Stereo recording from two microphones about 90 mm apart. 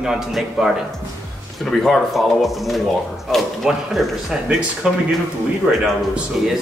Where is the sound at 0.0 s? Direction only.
5° right (ahead or behind).